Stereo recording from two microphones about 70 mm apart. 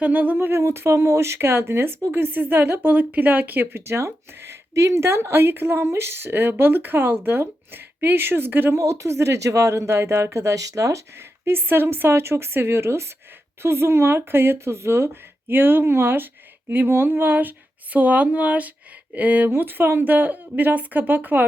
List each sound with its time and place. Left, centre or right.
0.0 s a woman's voice: right
0.3 s speech: right
8.7 s a woman's voice: right